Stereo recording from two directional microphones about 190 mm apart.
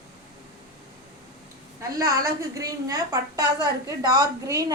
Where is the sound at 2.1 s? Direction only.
20° right (ahead or behind).